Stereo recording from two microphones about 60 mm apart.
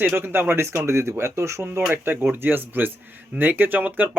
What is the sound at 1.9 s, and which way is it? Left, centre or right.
Speech, right.